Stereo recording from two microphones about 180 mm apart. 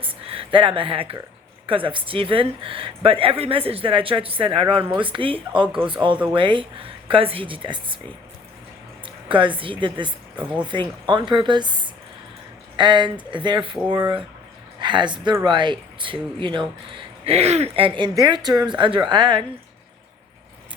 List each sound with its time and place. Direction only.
0.0 s a sound: 30° right (ahead or behind)
1.6 s speech: 30° right (ahead or behind)
5.6 s a man's voice: 5° right (ahead or behind)
5.9 s speech: 30° right (ahead or behind)
9.0 s a woman's voice: 25° right (ahead or behind)
10.3 s speech: 10° right (ahead or behind)
10.7 s speech: 25° right (ahead or behind)